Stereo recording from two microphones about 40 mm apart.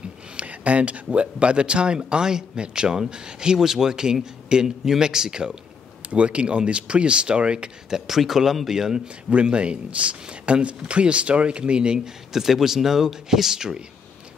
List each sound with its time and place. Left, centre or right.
0.4 s speech: right; by 5.6 s centre
6.0 s speech: right
7.9 s speech: centre; by 12.1 s right
12.3 s speech: centre